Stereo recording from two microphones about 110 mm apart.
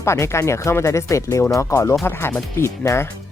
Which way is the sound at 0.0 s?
25° left (ahead or behind).